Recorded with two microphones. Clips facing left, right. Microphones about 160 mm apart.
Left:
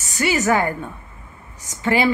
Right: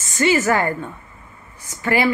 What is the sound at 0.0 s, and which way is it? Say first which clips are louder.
A woman's voice: right 3 dB; 15° left (ahead or behind).